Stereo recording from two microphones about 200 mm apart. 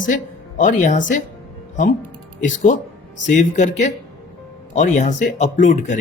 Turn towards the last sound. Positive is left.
turn(degrees=40)  # may be behind; listen again after turning